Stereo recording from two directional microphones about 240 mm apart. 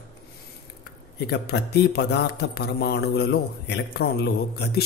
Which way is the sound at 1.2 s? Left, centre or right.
Left.